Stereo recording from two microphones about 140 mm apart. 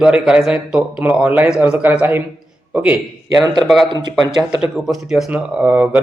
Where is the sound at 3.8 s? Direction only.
30° right (ahead or behind).